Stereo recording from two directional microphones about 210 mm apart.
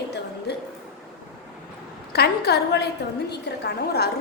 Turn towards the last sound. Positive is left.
turn(degrees=50)  # may be behind; listen again after turning